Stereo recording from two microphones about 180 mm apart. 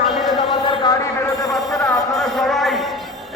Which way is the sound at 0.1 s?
Centre (ahead or behind).